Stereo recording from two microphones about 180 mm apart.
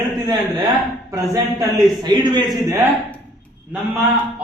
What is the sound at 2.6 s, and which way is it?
Speech, 15° right (ahead or behind).